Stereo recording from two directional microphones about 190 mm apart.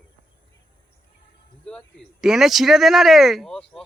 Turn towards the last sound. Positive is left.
turn(degrees=5)  # may be behind; listen again after turning